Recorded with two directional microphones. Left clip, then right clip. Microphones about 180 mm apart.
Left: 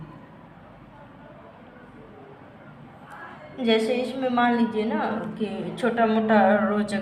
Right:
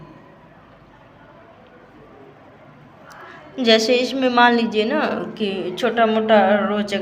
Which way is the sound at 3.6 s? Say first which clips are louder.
Right 7 dB; 35° right (ahead or behind).